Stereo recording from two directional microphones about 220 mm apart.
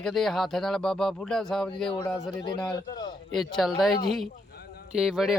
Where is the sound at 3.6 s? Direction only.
Centre (ahead or behind).